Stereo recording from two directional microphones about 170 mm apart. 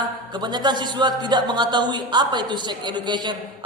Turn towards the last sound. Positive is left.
turn(degrees=-25)  # may be behind; listen again after turning